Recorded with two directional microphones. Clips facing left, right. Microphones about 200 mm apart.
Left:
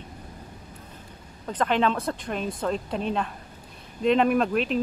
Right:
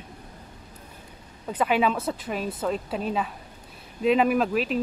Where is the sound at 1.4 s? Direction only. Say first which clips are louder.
Even; 10° right (ahead or behind).